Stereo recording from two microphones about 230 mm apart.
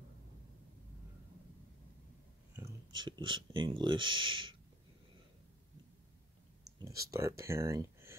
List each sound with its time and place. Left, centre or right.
2.5 s speech: centre
6.8 s speech: centre